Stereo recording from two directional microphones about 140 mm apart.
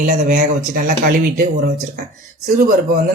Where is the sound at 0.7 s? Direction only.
70° right (ahead or behind); by 3.0 s 90° right.